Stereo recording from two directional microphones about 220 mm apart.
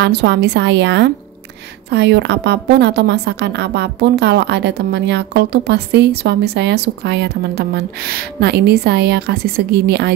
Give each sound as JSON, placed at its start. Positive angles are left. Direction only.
{"t": 0.0, "sound": "a woman's voice", "side_deg": -50}